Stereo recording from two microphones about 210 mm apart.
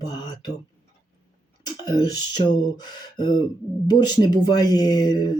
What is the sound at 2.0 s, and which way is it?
Speech, 20° left (ahead or behind).